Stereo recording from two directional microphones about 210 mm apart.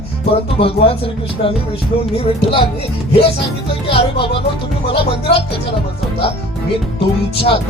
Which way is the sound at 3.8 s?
25° left (ahead or behind).